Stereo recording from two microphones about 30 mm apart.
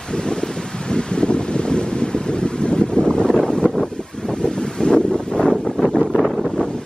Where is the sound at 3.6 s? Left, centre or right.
Centre.